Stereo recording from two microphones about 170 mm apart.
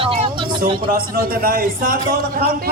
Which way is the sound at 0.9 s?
60° right (ahead or behind).